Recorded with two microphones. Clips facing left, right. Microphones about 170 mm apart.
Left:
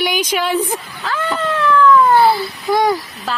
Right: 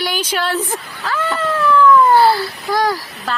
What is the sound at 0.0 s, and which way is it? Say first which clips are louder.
Speech: left 2 dB; 10° left (ahead or behind).